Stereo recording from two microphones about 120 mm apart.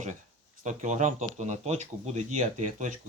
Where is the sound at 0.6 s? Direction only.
90° right.